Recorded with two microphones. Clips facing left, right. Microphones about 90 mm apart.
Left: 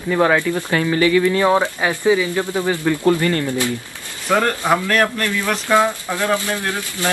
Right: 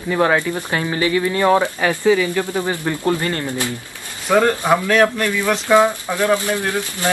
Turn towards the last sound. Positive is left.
turn(degrees=-20)  # may be behind; listen again after turning